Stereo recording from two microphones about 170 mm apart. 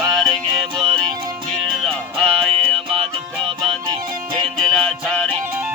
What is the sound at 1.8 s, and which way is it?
Music, 5° left (ahead or behind).